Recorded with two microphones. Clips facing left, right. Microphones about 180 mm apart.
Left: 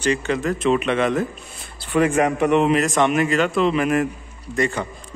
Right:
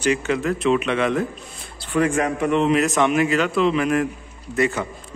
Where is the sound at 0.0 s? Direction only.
5° right (ahead or behind).